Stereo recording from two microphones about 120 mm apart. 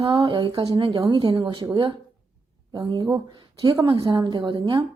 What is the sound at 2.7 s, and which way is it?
Speech, 40° right (ahead or behind).